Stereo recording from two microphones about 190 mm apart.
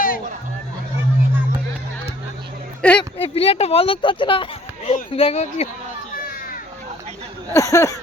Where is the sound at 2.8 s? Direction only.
5° left (ahead or behind).